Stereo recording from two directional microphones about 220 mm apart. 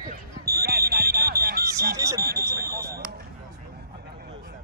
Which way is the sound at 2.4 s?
15° right (ahead or behind).